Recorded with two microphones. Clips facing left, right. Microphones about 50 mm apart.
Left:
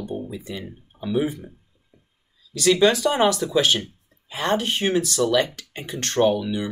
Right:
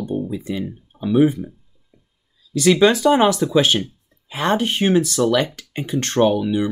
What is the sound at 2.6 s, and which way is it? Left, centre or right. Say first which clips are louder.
Speech: right 4 dB; right.